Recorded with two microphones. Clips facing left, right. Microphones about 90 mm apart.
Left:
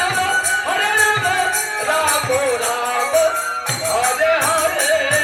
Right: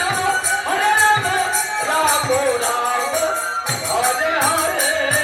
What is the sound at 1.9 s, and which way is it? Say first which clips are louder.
Music: even; 25° right (ahead or behind).